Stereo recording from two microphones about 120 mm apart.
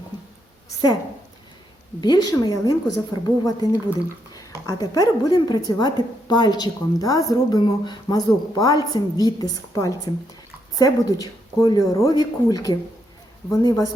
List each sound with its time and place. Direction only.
2.0 s a woman's voice: 35° left (ahead or behind)